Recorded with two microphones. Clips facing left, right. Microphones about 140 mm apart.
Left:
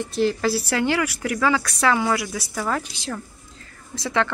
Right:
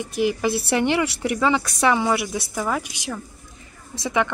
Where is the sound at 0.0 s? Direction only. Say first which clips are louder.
Even; 15° right (ahead or behind).